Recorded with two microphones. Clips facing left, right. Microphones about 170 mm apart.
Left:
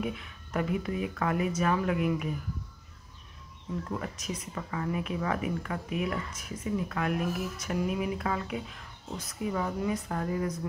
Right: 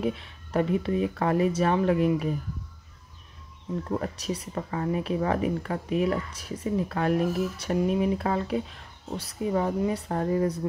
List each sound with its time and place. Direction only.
0.0 s speech: 30° right (ahead or behind)
3.9 s speech: 35° right (ahead or behind)